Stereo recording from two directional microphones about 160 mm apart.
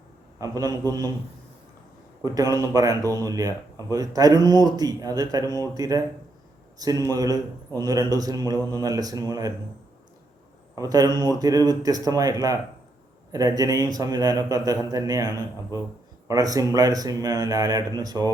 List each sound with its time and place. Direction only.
0.3 s speech: 20° right (ahead or behind)
2.2 s speech: 20° right (ahead or behind)
10.8 s speech: 25° right (ahead or behind)